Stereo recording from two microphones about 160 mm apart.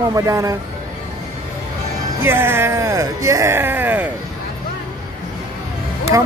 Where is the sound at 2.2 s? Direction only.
15° right (ahead or behind).